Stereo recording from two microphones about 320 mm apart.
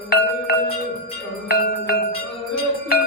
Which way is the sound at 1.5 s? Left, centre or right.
Left.